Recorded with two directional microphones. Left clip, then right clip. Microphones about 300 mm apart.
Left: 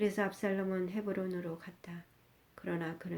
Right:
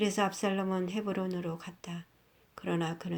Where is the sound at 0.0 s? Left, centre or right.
Centre.